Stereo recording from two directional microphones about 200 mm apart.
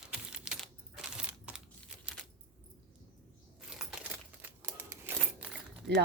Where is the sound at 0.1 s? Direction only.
5° right (ahead or behind).